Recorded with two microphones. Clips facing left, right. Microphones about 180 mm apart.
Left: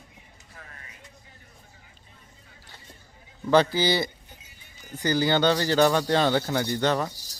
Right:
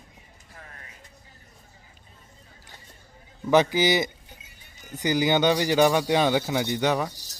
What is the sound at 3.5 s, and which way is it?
Speech, 15° right (ahead or behind).